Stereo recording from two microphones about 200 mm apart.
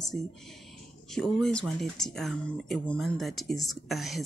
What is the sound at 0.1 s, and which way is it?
Speech, 5° left (ahead or behind).